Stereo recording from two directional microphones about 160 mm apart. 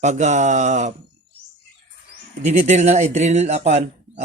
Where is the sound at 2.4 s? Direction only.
45° right (ahead or behind).